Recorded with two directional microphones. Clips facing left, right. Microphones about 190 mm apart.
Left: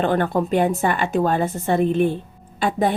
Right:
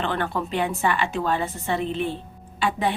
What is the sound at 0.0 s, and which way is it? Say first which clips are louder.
A woman's voice: left 7 dB; 45° left (ahead or behind).